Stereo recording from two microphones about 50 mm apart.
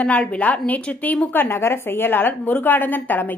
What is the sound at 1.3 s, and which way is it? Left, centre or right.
Speech, left.